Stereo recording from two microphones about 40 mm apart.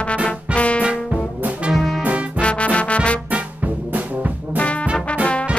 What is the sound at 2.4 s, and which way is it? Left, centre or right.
Music, left.